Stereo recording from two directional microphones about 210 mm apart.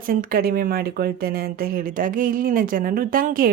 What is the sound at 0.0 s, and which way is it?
Speech, 45° right (ahead or behind).